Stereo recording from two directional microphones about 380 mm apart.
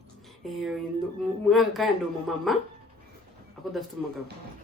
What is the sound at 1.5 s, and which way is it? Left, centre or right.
Speech, centre.